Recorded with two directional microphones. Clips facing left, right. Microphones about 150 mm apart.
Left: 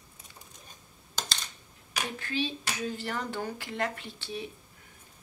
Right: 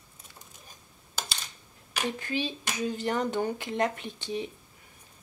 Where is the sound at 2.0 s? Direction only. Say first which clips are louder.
Right 2 dB; 15° right (ahead or behind).